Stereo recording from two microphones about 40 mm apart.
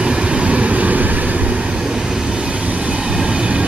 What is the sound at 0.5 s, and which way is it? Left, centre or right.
Vehicle, right.